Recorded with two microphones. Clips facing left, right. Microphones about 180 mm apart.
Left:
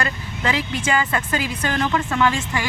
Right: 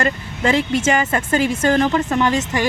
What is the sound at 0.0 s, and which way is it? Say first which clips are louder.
Speech: right 5 dB; 45° right (ahead or behind).